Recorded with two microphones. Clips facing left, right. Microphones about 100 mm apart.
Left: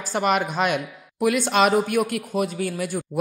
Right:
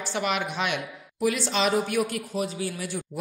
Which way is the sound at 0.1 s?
45° left (ahead or behind).